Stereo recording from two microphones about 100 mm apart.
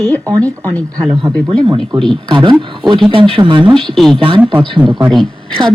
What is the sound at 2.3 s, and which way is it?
Speech, 50° right (ahead or behind).